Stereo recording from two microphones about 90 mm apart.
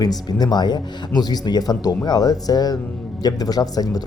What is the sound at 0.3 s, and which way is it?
Speech, 50° left (ahead or behind).